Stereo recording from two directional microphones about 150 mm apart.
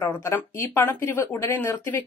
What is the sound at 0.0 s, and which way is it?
Speech, 20° left (ahead or behind).